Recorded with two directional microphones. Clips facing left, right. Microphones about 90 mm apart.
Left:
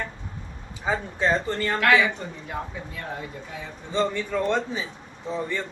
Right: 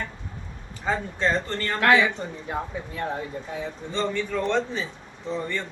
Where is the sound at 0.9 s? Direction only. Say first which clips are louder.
Left 1 dB; 10° left (ahead or behind).